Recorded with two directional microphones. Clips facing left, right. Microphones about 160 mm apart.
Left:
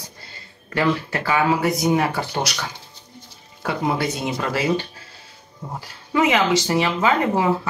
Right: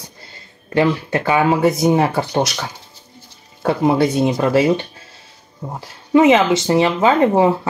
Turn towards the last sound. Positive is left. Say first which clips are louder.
# right 6 dB
turn(degrees=-25)  # may be behind; listen again after turning